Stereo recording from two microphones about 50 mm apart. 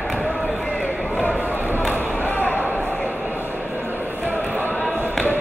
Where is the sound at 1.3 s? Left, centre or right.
Right.